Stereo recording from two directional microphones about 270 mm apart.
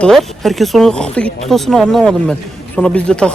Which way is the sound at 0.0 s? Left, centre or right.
Centre.